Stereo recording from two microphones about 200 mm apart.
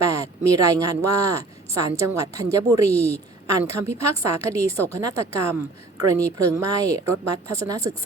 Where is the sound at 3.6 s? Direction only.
15° right (ahead or behind).